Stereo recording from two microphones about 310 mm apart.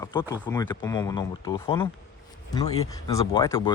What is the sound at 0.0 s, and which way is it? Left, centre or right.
Speech, centre.